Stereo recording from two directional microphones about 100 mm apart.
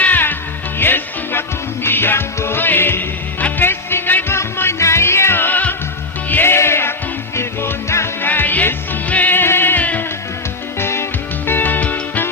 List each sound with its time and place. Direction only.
0.0 s music: 20° left (ahead or behind)